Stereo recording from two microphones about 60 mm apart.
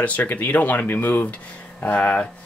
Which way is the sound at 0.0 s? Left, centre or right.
Left.